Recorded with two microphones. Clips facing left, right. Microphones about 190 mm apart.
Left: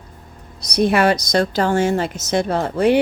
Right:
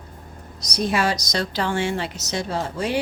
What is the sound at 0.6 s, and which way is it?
A woman's voice, 60° left (ahead or behind).